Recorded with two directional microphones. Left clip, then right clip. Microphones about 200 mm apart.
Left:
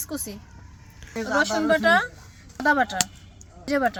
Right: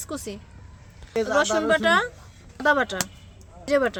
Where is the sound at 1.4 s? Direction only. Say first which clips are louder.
Left 1 dB; 40° right (ahead or behind).